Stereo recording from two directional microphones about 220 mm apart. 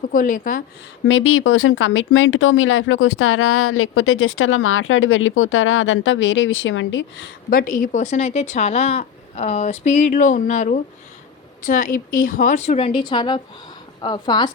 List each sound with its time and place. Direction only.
0.1 s speech: 40° left (ahead or behind)
1.0 s speech: 60° left (ahead or behind)
7.5 s a woman's voice: 40° left (ahead or behind); by 14.5 s 20° left (ahead or behind)